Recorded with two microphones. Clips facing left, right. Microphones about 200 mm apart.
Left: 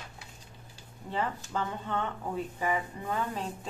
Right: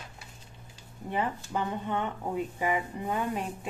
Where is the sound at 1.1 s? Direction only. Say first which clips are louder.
Right 2 dB; 15° right (ahead or behind).